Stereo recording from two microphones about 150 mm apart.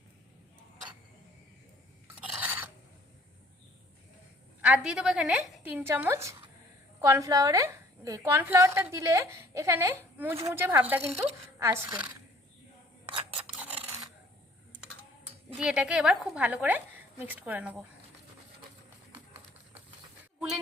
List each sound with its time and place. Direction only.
2.4 s filing: 10° right (ahead or behind)
4.6 s a woman's voice: 5° right (ahead or behind)
13.6 s filing: 10° right (ahead or behind)
15.5 s a woman's voice: 5° right (ahead or behind)